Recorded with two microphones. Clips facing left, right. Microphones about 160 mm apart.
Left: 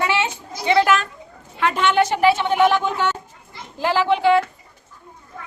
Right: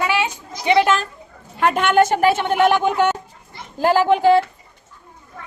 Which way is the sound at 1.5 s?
50° right (ahead or behind).